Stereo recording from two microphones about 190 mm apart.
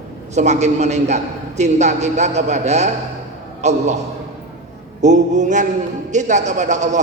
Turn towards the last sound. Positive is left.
turn(degrees=-40)  # may be behind; listen again after turning